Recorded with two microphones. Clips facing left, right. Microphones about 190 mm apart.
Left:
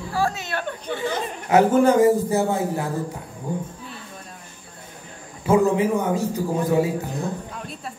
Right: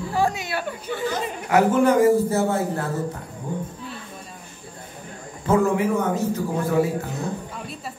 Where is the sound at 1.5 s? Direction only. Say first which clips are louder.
Left 2 dB; 25° left (ahead or behind).